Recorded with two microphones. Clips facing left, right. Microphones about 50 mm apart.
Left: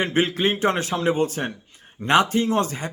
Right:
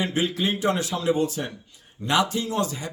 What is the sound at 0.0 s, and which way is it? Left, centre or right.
A man's voice, left.